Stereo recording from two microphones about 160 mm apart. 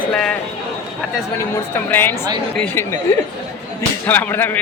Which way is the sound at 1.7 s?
15° left (ahead or behind).